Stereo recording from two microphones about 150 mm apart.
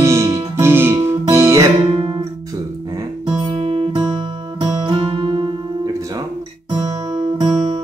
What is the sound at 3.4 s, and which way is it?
Music, 40° right (ahead or behind).